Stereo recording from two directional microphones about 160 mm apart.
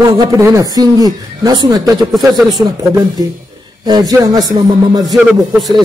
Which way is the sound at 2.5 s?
25° right (ahead or behind).